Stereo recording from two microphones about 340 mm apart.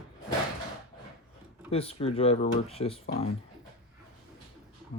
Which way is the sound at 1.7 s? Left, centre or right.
Centre.